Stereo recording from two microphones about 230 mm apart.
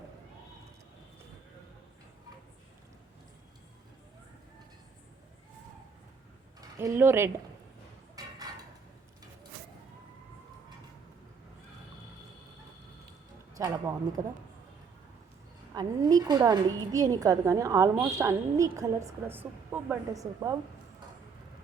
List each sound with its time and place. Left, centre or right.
6.6 s speech: centre
8.2 s a sound: centre
13.6 s a woman's voice: centre
15.7 s a woman's voice: centre